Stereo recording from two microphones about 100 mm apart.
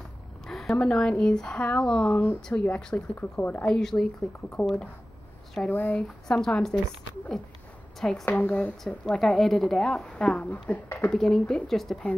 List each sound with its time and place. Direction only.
0.5 s a woman's voice: centre (ahead or behind); by 3.6 s 20° left (ahead or behind)
3.6 s a woman's voice: 5° left (ahead or behind)
6.2 s speech: 5° left (ahead or behind)
8.3 s a woman's voice: 15° left (ahead or behind)
8.8 s a woman's voice: 5° left (ahead or behind)
11.1 s speech: 5° left (ahead or behind)